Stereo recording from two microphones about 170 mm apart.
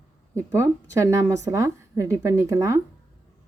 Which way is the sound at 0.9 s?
15° right (ahead or behind).